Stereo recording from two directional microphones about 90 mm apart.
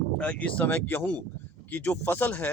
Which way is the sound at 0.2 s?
15° left (ahead or behind).